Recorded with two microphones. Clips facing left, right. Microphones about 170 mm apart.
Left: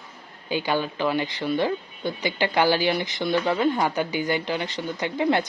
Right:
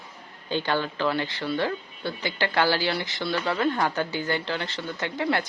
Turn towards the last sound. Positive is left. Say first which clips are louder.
# left 4 dB
turn(degrees=20)  # may be behind; listen again after turning